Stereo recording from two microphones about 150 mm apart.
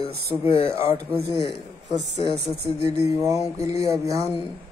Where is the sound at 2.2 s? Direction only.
35° left (ahead or behind).